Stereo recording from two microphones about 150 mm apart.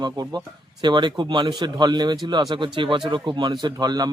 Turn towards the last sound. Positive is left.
turn(degrees=-25)  # may be behind; listen again after turning